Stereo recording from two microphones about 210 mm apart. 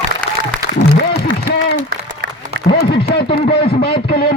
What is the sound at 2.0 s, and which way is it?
Applause, 40° right (ahead or behind).